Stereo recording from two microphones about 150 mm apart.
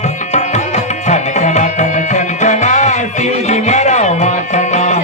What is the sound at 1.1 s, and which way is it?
Music, 50° left (ahead or behind).